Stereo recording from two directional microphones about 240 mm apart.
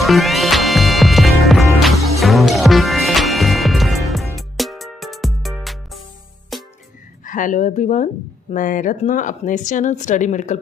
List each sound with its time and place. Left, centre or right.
0.0 s music: centre
7.3 s speech: left